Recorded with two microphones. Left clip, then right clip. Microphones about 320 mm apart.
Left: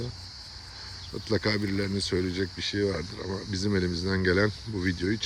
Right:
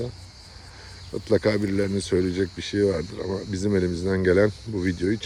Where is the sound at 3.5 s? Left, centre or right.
Centre.